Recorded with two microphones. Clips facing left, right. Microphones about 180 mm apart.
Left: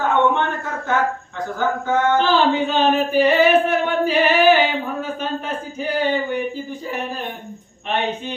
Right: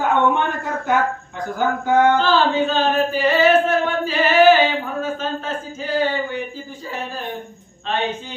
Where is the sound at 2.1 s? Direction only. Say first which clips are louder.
Even; 15° left (ahead or behind).